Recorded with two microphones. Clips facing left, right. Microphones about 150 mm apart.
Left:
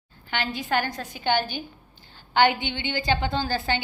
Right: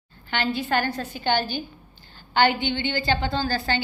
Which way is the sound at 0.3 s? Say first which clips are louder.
Right 3 dB; 10° left (ahead or behind).